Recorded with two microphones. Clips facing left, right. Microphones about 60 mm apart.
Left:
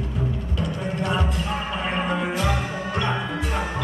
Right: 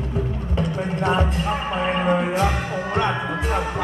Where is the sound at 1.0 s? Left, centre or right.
Right.